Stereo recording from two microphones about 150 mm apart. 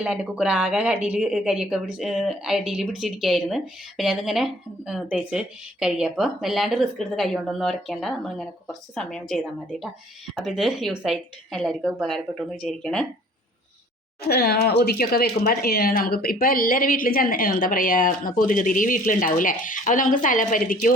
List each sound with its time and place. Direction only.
0.0 s speech: 5° right (ahead or behind)
14.2 s speech: 90° left; by 20.9 s 65° left (ahead or behind)